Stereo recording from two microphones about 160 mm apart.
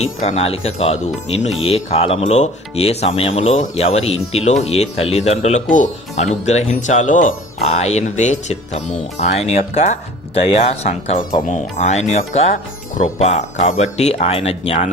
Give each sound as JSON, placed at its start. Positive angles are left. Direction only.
{"t": 0.0, "sound": "speech", "side_deg": 45}